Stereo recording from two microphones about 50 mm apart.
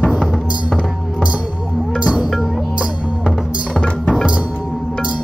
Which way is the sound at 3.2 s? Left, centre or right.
Centre.